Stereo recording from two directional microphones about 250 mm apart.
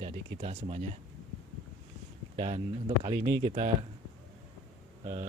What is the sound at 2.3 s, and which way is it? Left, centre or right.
Speech, right.